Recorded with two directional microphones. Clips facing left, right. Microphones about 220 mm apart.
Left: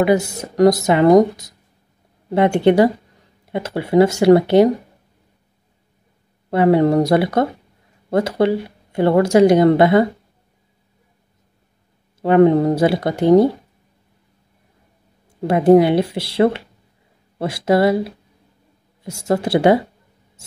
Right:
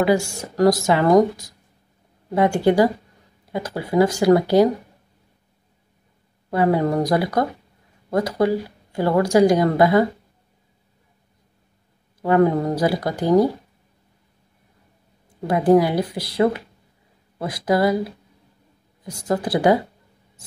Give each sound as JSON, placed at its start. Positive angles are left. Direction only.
{"t": 0.0, "sound": "speech", "side_deg": 20}
{"t": 6.5, "sound": "speech", "side_deg": 25}
{"t": 12.2, "sound": "speech", "side_deg": 25}
{"t": 15.4, "sound": "speech", "side_deg": 25}
{"t": 19.0, "sound": "speech", "side_deg": 25}